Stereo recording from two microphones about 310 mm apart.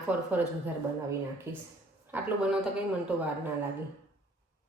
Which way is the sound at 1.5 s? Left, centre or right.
Centre.